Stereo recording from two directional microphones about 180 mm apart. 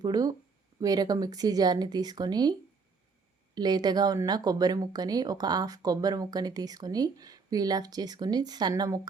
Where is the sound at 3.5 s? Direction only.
25° right (ahead or behind).